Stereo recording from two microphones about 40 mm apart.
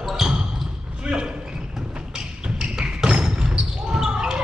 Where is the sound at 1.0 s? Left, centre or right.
Right.